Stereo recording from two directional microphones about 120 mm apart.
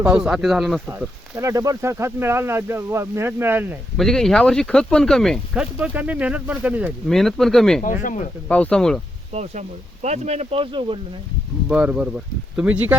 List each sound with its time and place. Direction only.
0.2 s speech: 5° right (ahead or behind)
1.4 s speech: 25° right (ahead or behind)
3.9 s speech: 5° left (ahead or behind)
5.8 s speech: 15° right (ahead or behind)
7.1 s speech: centre (ahead or behind)
9.3 s speech: 70° right (ahead or behind); by 11.0 s 45° right (ahead or behind)
11.7 s speech: 10° right (ahead or behind)